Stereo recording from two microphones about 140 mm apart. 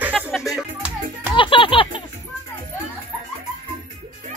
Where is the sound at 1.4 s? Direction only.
40° left (ahead or behind).